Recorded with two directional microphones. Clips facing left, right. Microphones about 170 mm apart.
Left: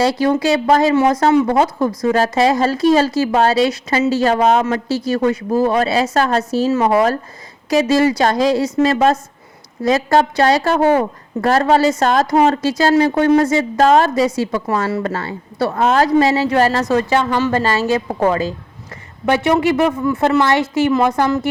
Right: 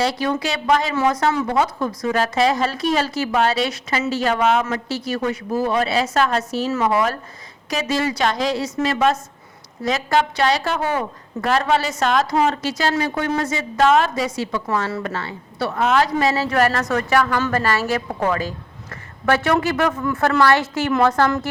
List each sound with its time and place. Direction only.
0.0 s a woman's voice: 35° left (ahead or behind)
7.9 s a woman's voice: 30° left (ahead or behind); by 21.4 s 10° left (ahead or behind)